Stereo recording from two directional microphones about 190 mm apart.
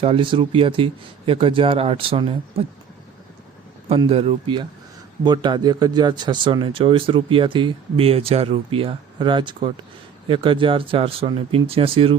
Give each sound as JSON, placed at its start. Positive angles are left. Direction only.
{"t": 0.0, "sound": "speech", "side_deg": -30}
{"t": 3.8, "sound": "speech", "side_deg": -30}